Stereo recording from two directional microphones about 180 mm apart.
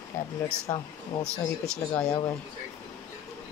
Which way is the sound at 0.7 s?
10° left (ahead or behind).